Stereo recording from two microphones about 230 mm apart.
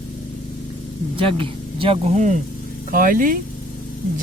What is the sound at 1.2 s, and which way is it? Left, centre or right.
Speech, right.